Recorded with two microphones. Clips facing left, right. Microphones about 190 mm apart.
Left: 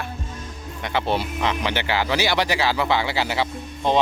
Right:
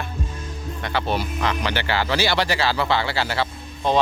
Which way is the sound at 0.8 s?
20° left (ahead or behind).